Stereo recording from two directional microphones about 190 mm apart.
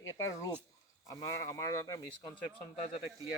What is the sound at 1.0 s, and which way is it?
Speech, 20° left (ahead or behind).